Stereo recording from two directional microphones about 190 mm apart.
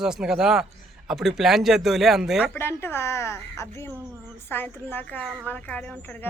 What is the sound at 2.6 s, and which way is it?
Speech, 10° left (ahead or behind).